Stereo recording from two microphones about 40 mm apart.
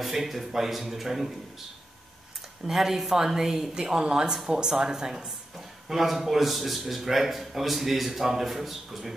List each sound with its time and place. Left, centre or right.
0.0 s a man's voice: centre
2.7 s a woman's voice: centre
5.9 s a man's voice: centre